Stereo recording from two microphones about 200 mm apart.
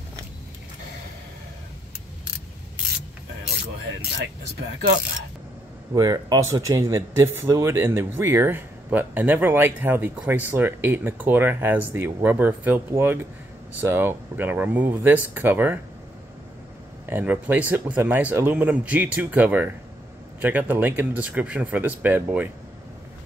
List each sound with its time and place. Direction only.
5.9 s speech: 20° right (ahead or behind)
17.0 s speech: 10° right (ahead or behind)